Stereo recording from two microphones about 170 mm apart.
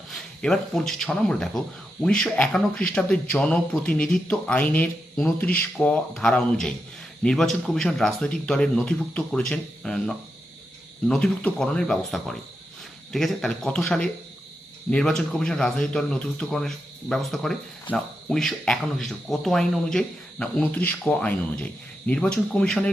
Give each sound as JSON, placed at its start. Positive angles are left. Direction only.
{"t": 0.1, "sound": "speech", "side_deg": 5}